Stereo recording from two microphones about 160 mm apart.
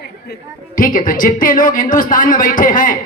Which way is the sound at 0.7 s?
60° left (ahead or behind).